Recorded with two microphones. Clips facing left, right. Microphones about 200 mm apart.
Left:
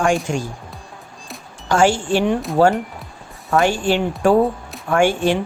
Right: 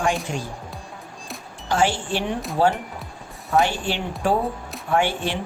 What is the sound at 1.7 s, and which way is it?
Speech, 45° left (ahead or behind).